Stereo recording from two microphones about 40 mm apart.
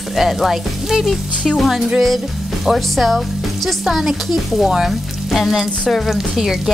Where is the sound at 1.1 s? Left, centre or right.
Centre.